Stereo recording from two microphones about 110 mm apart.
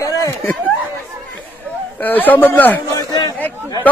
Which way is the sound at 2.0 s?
15° left (ahead or behind).